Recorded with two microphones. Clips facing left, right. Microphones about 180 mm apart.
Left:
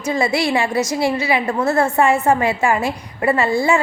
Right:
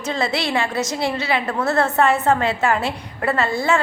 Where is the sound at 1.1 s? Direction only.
10° left (ahead or behind).